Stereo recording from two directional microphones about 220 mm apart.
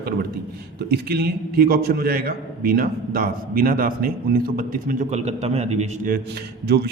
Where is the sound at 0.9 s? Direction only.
45° right (ahead or behind); by 6.1 s 30° right (ahead or behind).